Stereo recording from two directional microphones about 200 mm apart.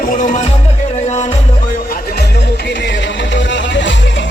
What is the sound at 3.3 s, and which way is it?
Music, 65° left (ahead or behind).